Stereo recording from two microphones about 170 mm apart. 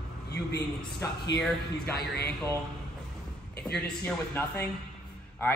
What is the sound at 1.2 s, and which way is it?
Speech, 75° left (ahead or behind).